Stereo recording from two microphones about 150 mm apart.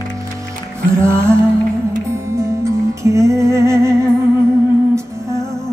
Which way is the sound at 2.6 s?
20° right (ahead or behind).